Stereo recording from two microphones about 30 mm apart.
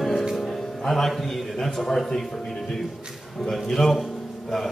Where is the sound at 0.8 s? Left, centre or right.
Centre.